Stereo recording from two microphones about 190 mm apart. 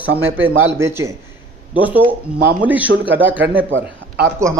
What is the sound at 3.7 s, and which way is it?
Speech, 75° right (ahead or behind).